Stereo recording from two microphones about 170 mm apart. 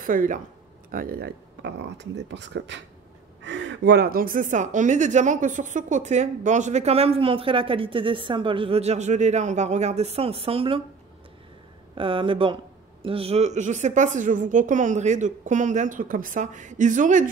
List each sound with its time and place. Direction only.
0.0 s a woman's voice: 50° right (ahead or behind)
0.9 s a woman's voice: 65° right (ahead or behind); by 10.8 s 35° right (ahead or behind)
11.9 s a woman's voice: 30° right (ahead or behind); by 17.3 s 50° right (ahead or behind)